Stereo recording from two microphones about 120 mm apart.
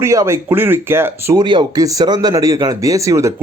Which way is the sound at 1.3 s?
35° right (ahead or behind).